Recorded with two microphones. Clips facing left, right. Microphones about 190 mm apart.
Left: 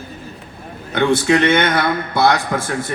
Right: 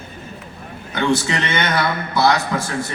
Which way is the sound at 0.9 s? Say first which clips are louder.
Left 5 dB; 60° left (ahead or behind).